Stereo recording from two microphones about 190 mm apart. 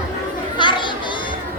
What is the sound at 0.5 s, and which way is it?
Children playing, 25° left (ahead or behind).